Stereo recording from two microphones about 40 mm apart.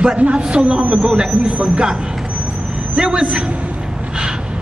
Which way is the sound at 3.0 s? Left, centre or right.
Centre.